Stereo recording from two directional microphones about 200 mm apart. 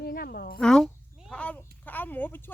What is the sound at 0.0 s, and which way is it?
Speech, 50° left (ahead or behind).